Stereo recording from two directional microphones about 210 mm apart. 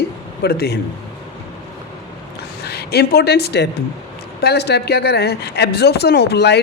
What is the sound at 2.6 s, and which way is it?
A woman's voice, 50° left (ahead or behind).